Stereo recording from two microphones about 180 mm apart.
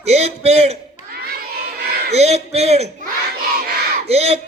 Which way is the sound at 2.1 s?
35° right (ahead or behind).